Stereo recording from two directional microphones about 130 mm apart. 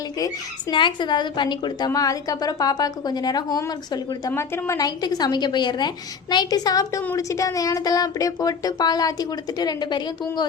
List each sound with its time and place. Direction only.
0.7 s a woman's voice: 35° left (ahead or behind)
4.3 s a woman's voice: 20° left (ahead or behind); by 10.4 s 35° left (ahead or behind)